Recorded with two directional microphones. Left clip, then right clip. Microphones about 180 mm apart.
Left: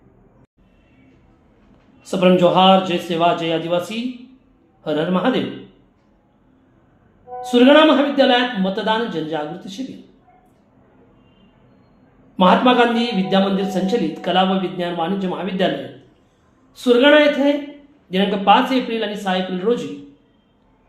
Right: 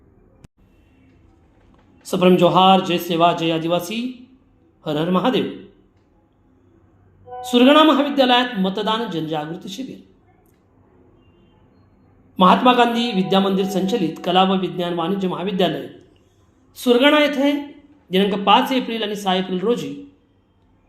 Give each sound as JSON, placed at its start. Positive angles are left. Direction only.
{"t": 2.0, "sound": "a man's voice", "side_deg": -30}
{"t": 7.3, "sound": "speech", "side_deg": -30}
{"t": 12.4, "sound": "a man's voice", "side_deg": -30}
{"t": 16.7, "sound": "a man's voice", "side_deg": -35}